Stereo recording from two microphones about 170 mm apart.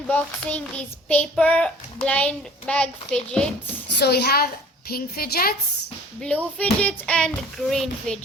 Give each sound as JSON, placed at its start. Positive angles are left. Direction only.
{"t": 0.1, "sound": "child singing", "side_deg": 10}
{"t": 3.2, "sound": "speech", "side_deg": 5}
{"t": 3.9, "sound": "a child's voice", "side_deg": 75}
{"t": 4.9, "sound": "a woman's voice", "side_deg": 60}
{"t": 6.2, "sound": "speech", "side_deg": 5}